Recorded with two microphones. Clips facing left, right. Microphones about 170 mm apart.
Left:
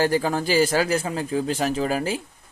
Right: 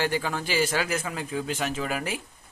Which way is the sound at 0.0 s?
40° left (ahead or behind).